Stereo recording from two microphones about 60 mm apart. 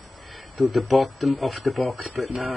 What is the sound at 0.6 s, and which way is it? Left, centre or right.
Speech, centre.